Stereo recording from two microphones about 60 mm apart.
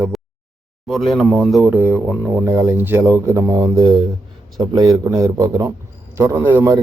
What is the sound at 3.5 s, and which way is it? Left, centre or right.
Speech, right.